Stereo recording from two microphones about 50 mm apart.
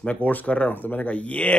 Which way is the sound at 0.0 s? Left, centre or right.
Left.